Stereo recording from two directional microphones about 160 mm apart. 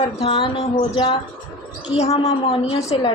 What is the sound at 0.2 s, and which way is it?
A woman's voice, 35° left (ahead or behind).